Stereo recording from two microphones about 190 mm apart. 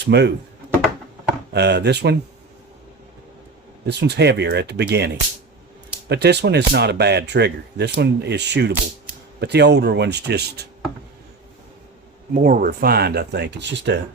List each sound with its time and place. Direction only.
0.0 s speech: 60° right (ahead or behind)
1.5 s speech: 60° right (ahead or behind)
3.8 s speech: 60° right (ahead or behind)
12.3 s speech: 45° right (ahead or behind); by 14.0 s 65° right (ahead or behind)